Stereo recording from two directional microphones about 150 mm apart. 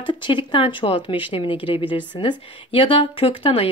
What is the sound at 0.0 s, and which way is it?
Speech, 30° left (ahead or behind).